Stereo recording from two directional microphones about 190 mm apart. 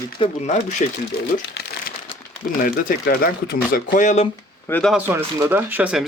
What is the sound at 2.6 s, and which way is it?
Speech, 50° left (ahead or behind).